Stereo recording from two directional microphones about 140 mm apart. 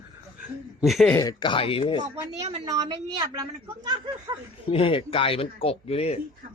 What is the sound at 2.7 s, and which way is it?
A woman's voice, 35° right (ahead or behind).